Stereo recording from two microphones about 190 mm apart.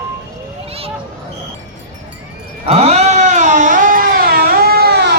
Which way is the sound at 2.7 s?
35° right (ahead or behind).